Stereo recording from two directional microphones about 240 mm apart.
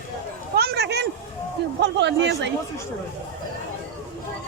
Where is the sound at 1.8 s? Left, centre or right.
Right.